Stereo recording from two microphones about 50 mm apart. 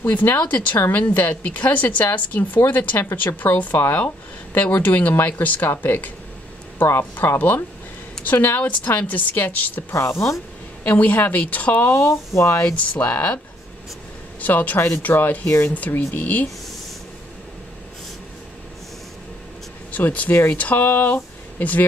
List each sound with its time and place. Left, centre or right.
0.0 s a woman's voice: left
0.7 s a woman's voice: left
4.6 s a woman's voice: left
9.9 s speech: left
10.8 s a woman's voice: left
12.1 s speech: left
12.9 s a woman's voice: left
14.4 s a woman's voice: left
15.4 s speech: left
15.9 s speech: left
16.2 s a woman's voice: left
19.9 s speech: left